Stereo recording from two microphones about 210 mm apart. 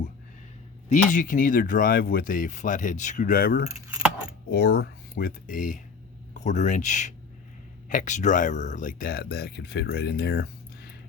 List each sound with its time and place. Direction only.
0.9 s speech: 40° left (ahead or behind)